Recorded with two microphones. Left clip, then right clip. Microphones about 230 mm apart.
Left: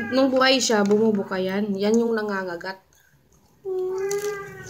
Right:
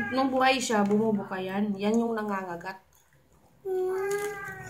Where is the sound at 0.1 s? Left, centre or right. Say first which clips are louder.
Left 6 dB; left.